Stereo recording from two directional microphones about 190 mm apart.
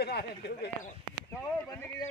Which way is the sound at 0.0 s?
60° left (ahead or behind).